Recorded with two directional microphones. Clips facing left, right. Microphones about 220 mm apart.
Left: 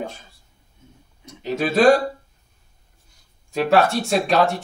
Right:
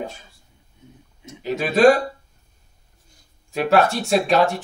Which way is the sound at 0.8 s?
15° right (ahead or behind).